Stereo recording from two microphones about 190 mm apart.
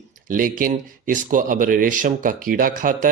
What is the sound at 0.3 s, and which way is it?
Speech, 45° right (ahead or behind).